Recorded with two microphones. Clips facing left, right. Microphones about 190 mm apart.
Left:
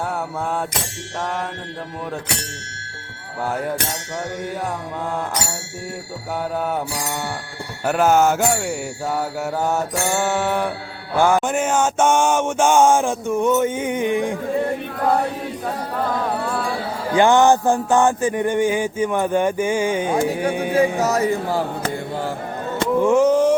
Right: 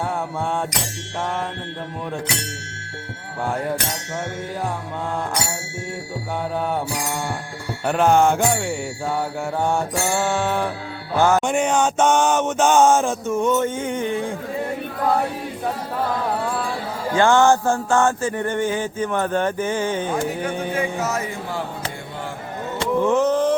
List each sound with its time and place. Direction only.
7.9 s mantra: 5° left (ahead or behind)
10.2 s music: 10° left (ahead or behind)
17.2 s music: 15° left (ahead or behind)
20.7 s mantra: 35° left (ahead or behind)
23.0 s a sound: 10° left (ahead or behind)